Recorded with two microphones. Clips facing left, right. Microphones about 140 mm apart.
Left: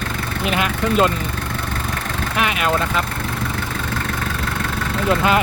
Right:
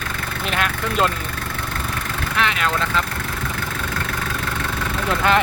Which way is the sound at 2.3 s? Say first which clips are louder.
Left 2 dB; 15° left (ahead or behind).